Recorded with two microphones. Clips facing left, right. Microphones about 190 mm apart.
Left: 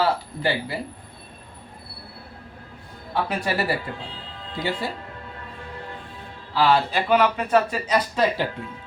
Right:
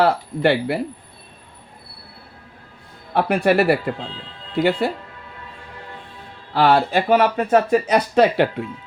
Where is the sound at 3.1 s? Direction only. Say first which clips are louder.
Right 8 dB; 60° right (ahead or behind).